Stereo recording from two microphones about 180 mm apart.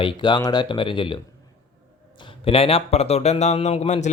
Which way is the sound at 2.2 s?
30° left (ahead or behind).